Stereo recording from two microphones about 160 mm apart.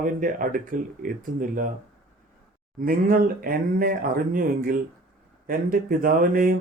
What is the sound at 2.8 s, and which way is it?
Speech, 65° right (ahead or behind).